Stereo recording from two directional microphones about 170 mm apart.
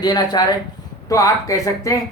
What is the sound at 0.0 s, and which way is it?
Speech, 25° left (ahead or behind).